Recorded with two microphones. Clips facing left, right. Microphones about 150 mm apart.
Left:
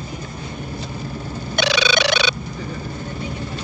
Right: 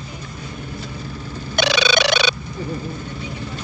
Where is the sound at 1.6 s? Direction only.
50° right (ahead or behind).